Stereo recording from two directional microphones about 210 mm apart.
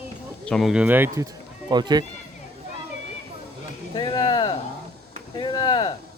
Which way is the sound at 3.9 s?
25° left (ahead or behind).